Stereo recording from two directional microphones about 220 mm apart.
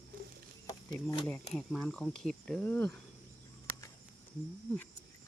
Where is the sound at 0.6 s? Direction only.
15° left (ahead or behind).